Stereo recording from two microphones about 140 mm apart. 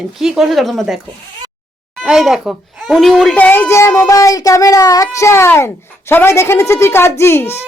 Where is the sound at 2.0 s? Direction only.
5° right (ahead or behind).